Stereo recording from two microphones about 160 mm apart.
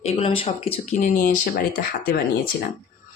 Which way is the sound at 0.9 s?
55° left (ahead or behind).